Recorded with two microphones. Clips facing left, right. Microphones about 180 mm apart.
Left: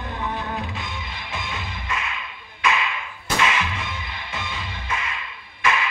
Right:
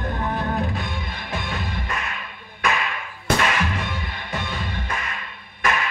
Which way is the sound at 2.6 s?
50° right (ahead or behind).